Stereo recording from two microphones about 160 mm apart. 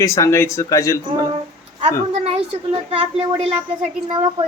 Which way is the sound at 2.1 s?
40° right (ahead or behind).